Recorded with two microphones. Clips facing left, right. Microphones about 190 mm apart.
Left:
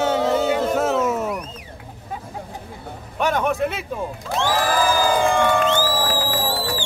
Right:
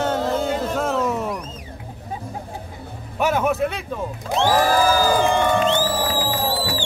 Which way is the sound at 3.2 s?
5° right (ahead or behind).